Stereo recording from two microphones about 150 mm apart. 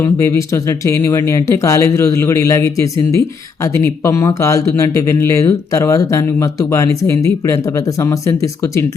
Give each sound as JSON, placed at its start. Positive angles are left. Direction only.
{"t": 0.0, "sound": "speech", "side_deg": 20}